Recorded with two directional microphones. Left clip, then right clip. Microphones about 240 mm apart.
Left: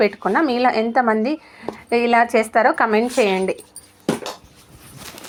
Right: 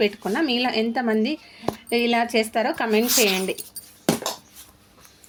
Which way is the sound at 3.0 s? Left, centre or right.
Left.